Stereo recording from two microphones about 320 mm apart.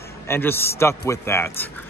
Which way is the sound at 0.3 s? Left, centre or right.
Centre.